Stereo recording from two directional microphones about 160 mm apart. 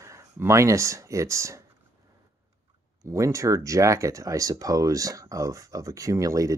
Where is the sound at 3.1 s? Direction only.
20° right (ahead or behind).